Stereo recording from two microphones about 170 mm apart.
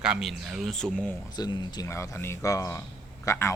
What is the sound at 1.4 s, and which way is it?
Speech, 25° left (ahead or behind).